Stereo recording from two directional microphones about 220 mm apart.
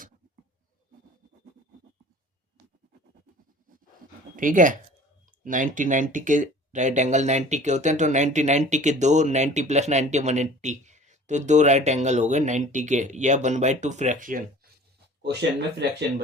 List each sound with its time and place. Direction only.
4.4 s speech: 35° right (ahead or behind)
15.2 s speech: 50° right (ahead or behind)